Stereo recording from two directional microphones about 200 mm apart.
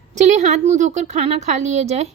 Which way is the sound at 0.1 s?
35° right (ahead or behind).